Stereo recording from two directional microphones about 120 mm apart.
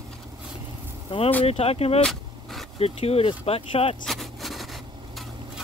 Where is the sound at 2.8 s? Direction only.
55° left (ahead or behind).